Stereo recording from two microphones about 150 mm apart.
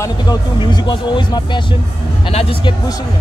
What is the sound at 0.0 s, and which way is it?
Speech, 30° left (ahead or behind).